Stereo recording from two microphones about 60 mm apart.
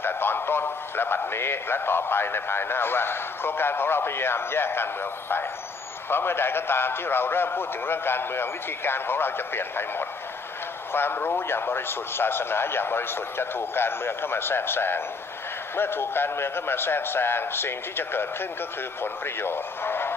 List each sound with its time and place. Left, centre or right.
0.0 s a man's voice: left
6.1 s a man's voice: left